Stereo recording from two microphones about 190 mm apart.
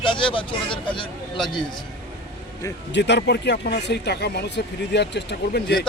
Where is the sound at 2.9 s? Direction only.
65° left (ahead or behind).